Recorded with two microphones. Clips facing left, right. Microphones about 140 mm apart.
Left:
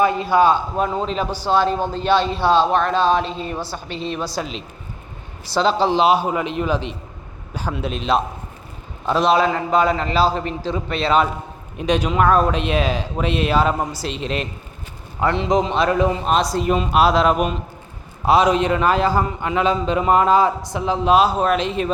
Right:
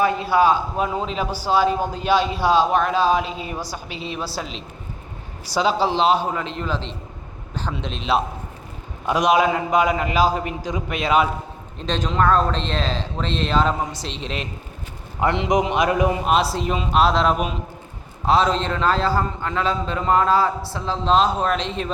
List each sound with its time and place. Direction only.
0.0 s a man's voice: centre (ahead or behind)
9.0 s a man's voice: 15° right (ahead or behind)
11.8 s a man's voice: 10° left (ahead or behind)
15.2 s a man's voice: 20° right (ahead or behind)
16.3 s a man's voice: 5° right (ahead or behind)
18.3 s a man's voice: 15° left (ahead or behind)